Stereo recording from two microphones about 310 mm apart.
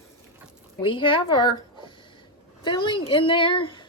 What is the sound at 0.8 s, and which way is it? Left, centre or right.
A woman's voice, centre.